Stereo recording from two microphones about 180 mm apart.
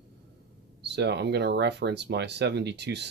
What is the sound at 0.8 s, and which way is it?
Speech, 70° right (ahead or behind).